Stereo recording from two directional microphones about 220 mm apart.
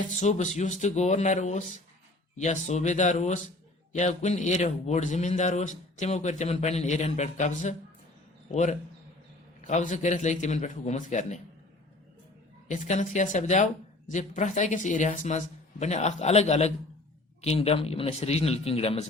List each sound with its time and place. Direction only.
0.1 s a man's voice: 30° left (ahead or behind)
9.6 s a man's voice: 30° left (ahead or behind)
12.6 s a man's voice: 35° left (ahead or behind)